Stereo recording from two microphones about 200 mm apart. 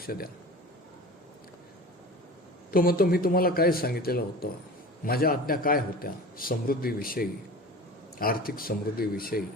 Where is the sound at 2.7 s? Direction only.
45° left (ahead or behind).